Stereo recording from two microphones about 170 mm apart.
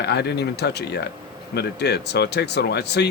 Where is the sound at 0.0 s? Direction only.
75° left (ahead or behind).